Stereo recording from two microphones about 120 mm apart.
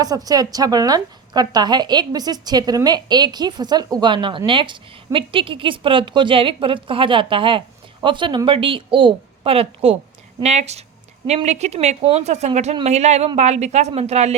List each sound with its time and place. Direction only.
0.0 s a woman's voice: 30° right (ahead or behind); by 10.0 s 55° right (ahead or behind)
10.4 s speech: 65° right (ahead or behind)